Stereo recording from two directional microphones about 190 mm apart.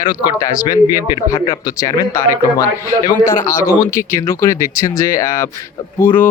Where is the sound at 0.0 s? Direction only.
20° left (ahead or behind).